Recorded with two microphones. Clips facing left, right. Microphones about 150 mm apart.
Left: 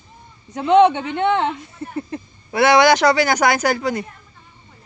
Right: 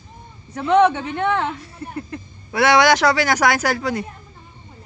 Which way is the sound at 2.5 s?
Centre (ahead or behind).